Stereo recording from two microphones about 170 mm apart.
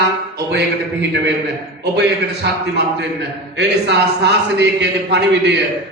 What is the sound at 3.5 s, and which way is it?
A man's voice, 80° right.